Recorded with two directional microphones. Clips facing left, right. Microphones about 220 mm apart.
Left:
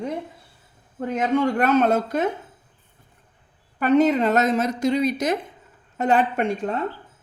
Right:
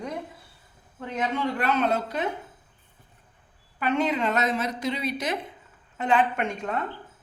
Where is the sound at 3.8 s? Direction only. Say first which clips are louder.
Left 8 dB; 40° left (ahead or behind).